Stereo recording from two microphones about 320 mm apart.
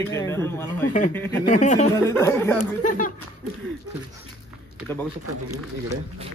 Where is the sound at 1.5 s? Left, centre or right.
Left.